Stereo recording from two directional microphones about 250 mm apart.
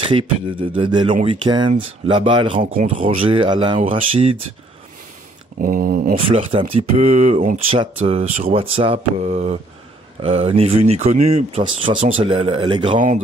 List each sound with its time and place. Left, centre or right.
0.0 s beatboxing: centre
0.7 s speech: centre
2.6 s speech: right
5.6 s speech: right
6.1 s speech: right